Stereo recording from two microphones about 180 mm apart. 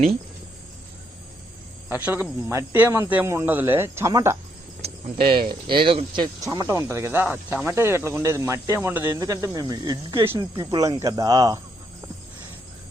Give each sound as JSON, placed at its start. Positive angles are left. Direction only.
{"t": 1.9, "sound": "speech", "side_deg": -10}
{"t": 4.8, "sound": "speech", "side_deg": -30}